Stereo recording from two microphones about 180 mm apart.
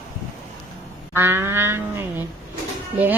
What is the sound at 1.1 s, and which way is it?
Speech, 15° right (ahead or behind).